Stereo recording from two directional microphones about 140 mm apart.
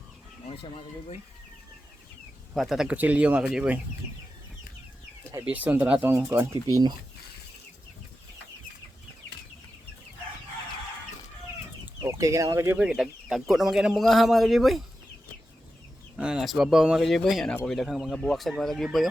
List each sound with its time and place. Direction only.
0.4 s speech: 40° left (ahead or behind)
2.6 s speech: centre (ahead or behind)
5.5 s speech: 10° right (ahead or behind)
12.0 s speech: 20° right (ahead or behind)
12.8 s speech: 5° right (ahead or behind)
16.1 s speech: 5° right (ahead or behind)